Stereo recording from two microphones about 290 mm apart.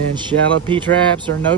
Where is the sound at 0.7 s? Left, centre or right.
Centre.